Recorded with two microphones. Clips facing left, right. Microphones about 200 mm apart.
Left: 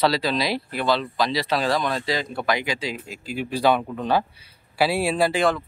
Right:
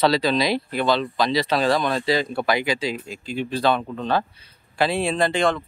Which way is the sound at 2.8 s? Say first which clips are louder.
Right 3 dB; centre (ahead or behind).